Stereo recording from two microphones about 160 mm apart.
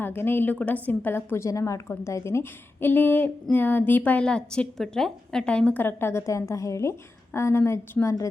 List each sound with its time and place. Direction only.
0.0 s a woman's voice: 15° left (ahead or behind)